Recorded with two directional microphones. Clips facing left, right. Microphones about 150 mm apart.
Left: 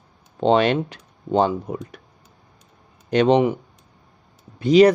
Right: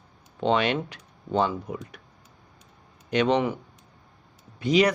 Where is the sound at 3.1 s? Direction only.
35° left (ahead or behind).